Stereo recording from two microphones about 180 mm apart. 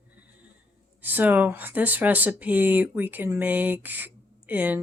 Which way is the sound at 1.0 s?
10° right (ahead or behind).